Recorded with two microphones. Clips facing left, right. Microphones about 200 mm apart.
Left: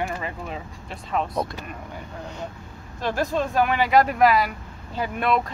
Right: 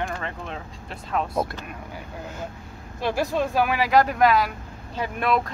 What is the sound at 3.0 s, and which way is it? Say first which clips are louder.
Speech: even; 10° right (ahead or behind).